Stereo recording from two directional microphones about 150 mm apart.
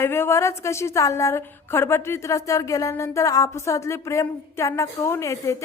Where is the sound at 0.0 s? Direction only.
15° left (ahead or behind).